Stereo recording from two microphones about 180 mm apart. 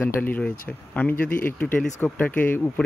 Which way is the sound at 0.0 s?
10° left (ahead or behind).